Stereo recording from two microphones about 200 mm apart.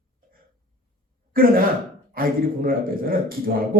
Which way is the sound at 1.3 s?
45° right (ahead or behind).